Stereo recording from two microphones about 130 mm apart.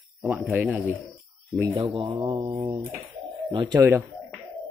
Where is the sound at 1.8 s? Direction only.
40° right (ahead or behind).